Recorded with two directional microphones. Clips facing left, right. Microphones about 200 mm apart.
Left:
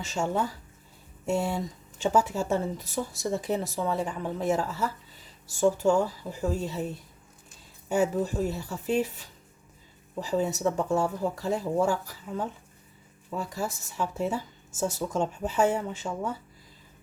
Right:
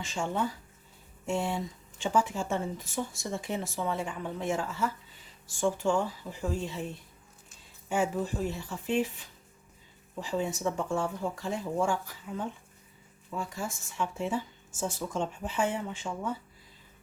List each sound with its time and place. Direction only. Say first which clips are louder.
0.0 s speech: left 3 dB; 40° left (ahead or behind)
7.9 s speech: left 4 dB; 40° left (ahead or behind)